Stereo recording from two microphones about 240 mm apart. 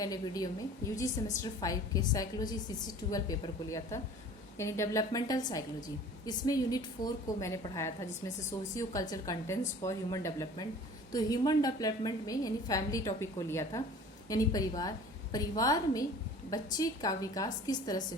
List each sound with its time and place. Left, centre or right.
0.0 s a woman's voice: centre